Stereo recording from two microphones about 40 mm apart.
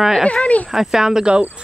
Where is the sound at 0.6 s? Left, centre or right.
Centre.